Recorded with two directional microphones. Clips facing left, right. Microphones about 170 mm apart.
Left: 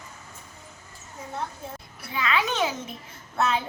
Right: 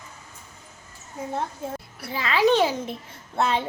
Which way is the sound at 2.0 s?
35° right (ahead or behind).